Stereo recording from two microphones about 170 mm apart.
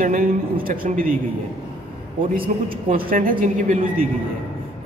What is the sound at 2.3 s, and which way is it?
A woman's voice, 60° right (ahead or behind).